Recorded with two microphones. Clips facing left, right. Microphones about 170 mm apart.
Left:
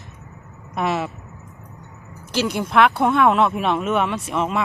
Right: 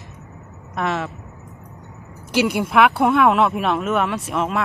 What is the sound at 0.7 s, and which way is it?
Speech, 5° left (ahead or behind).